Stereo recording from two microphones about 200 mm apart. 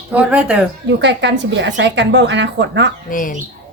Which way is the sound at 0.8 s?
60° right (ahead or behind).